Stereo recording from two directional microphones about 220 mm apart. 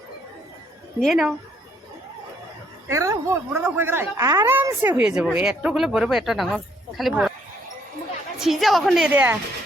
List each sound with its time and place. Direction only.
1.0 s a woman's voice: centre (ahead or behind)
2.9 s speech: 15° right (ahead or behind)
8.4 s a woman's voice: centre (ahead or behind)